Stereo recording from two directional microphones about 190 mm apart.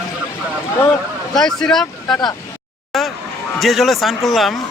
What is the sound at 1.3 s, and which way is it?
Speech, 5° left (ahead or behind).